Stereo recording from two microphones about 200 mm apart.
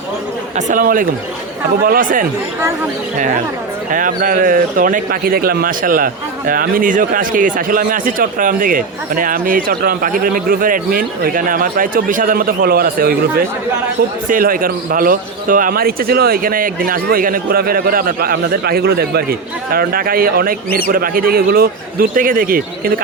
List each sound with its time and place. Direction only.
0.5 s a man's voice: 45° right (ahead or behind)
3.9 s a man's voice: 45° right (ahead or behind)
14.3 s a man's voice: 45° right (ahead or behind)